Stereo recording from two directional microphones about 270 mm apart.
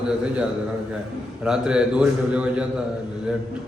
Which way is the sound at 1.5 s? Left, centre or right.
Centre.